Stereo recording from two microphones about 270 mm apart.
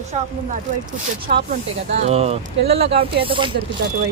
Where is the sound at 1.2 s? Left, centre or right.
Right.